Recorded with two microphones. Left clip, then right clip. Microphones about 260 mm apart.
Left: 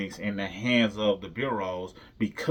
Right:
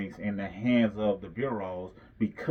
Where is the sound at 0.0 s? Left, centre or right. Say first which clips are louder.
Left 3 dB; centre.